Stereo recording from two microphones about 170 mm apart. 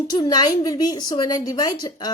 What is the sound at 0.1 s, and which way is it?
A woman's voice, 25° left (ahead or behind).